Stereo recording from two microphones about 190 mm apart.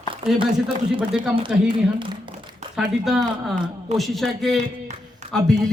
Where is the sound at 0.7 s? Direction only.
25° right (ahead or behind).